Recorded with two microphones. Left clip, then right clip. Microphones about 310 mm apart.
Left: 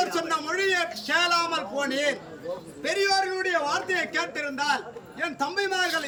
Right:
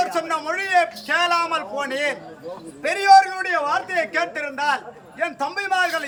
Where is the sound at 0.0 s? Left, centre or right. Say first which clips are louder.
Right 4 dB; centre.